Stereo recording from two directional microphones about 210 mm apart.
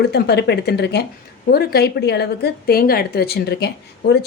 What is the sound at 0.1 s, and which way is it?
Speech, 50° left (ahead or behind).